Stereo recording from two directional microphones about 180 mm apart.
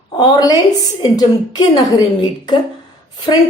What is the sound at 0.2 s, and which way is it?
A woman's voice, 20° left (ahead or behind).